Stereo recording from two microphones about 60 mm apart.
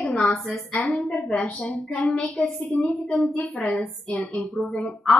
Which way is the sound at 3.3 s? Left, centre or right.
Left.